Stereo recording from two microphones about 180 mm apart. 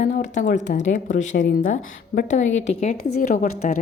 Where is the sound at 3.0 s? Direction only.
55° left (ahead or behind).